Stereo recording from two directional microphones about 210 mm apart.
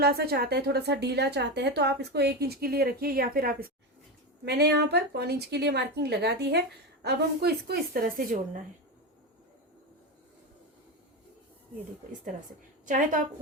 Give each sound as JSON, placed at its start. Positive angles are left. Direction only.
{"t": 0.0, "sound": "a woman's voice", "side_deg": -50}
{"t": 12.8, "sound": "a woman's voice", "side_deg": -40}